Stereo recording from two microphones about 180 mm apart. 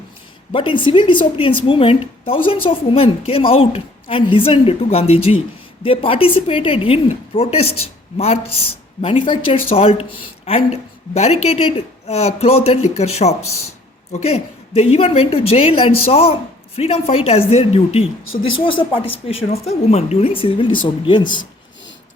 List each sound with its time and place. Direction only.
0.5 s a woman's voice: 25° left (ahead or behind)
9.0 s a woman's voice: 30° left (ahead or behind)